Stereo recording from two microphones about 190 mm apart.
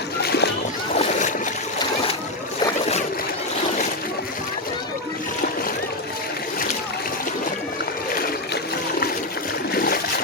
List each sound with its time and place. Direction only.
0.2 s splash: 60° left (ahead or behind)
0.9 s boat: 35° left (ahead or behind)
9.7 s a sound: 50° left (ahead or behind)